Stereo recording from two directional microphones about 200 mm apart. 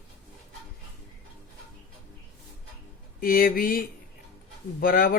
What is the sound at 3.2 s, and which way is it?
Speech, 45° left (ahead or behind).